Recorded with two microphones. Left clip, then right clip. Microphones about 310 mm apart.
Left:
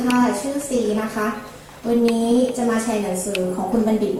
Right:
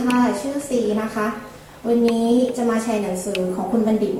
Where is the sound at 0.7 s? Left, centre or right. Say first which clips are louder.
Right 1 dB; centre.